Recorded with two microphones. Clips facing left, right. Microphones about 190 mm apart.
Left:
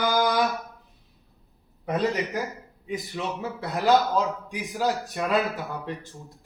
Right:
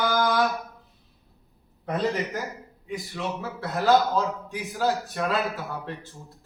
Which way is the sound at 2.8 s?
20° left (ahead or behind).